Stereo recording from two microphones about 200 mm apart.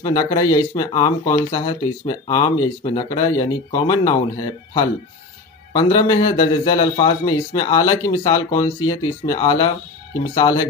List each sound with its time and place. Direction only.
0.0 s speech: 20° left (ahead or behind)
5.7 s speech: 20° left (ahead or behind)